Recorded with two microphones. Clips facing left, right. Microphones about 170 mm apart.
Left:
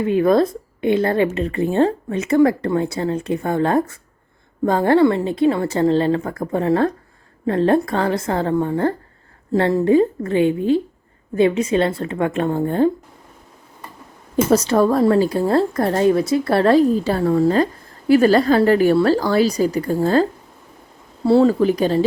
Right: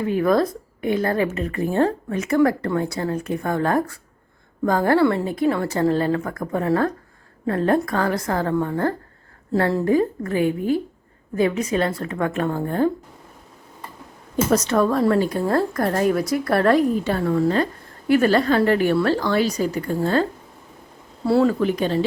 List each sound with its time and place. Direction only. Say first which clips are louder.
0.1 s a woman's voice: left 4 dB; 25° left (ahead or behind)
14.5 s a woman's voice: left 3 dB; 30° left (ahead or behind)
21.2 s a woman's voice: left 4 dB; 25° left (ahead or behind)
21.6 s a woman's voice: left 4 dB; 35° left (ahead or behind)